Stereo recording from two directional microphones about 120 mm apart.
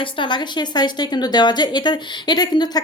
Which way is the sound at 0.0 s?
40° left (ahead or behind).